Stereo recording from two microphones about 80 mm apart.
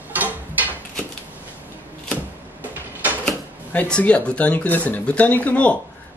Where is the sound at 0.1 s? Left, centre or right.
Right.